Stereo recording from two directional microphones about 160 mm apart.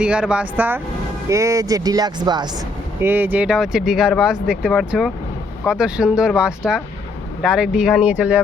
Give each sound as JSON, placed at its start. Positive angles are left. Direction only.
{"t": 0.0, "sound": "speech", "side_deg": -5}
{"t": 3.0, "sound": "speech", "side_deg": -15}